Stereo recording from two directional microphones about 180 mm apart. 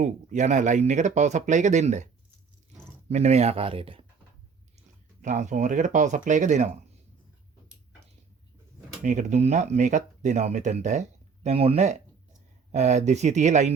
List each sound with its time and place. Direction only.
0.0 s speech: 40° right (ahead or behind)
3.1 s speech: 40° right (ahead or behind)
5.2 s speech: 40° right (ahead or behind)
9.0 s speech: 40° right (ahead or behind)